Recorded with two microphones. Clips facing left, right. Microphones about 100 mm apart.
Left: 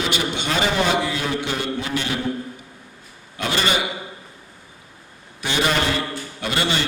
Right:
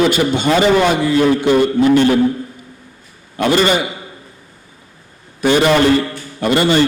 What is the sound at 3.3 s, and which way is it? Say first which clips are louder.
Speech: right 9 dB; 45° right (ahead or behind).